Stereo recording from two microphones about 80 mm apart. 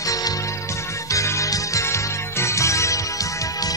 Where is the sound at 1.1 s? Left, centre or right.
Left.